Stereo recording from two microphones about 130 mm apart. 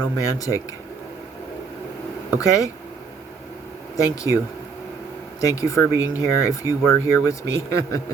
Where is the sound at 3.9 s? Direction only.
25° left (ahead or behind).